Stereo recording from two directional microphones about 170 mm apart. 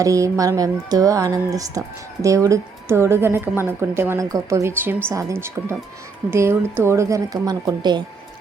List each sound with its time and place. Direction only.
0.0 s a woman's voice: 20° right (ahead or behind)